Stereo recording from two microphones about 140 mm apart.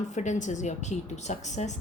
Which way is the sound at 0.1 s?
60° left (ahead or behind).